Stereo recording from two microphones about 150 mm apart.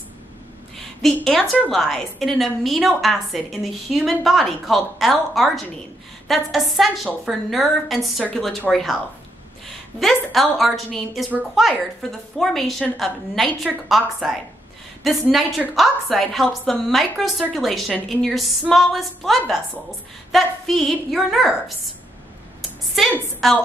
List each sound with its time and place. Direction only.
0.7 s a woman's voice: centre (ahead or behind)
9.9 s a woman's voice: centre (ahead or behind)
23.4 s a woman's voice: centre (ahead or behind)